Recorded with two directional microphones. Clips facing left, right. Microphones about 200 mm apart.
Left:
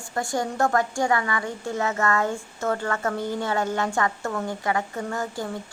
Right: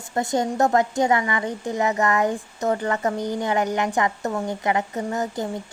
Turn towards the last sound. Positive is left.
turn(degrees=-20)  # may be behind; listen again after turning